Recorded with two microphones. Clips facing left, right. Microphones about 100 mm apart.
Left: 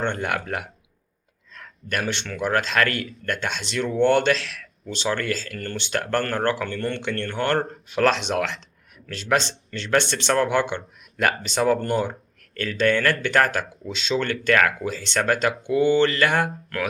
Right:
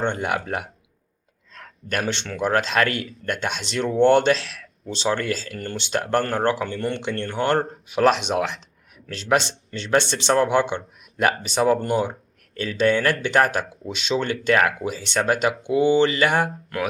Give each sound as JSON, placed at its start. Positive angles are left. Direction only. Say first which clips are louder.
{"t": 0.0, "sound": "speech", "louder": "right 1 dB", "side_deg": -20}